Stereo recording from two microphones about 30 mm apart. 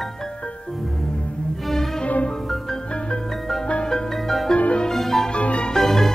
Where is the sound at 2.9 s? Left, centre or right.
Left.